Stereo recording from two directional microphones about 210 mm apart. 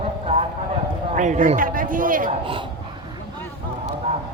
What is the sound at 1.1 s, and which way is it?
A man's voice, 35° right (ahead or behind).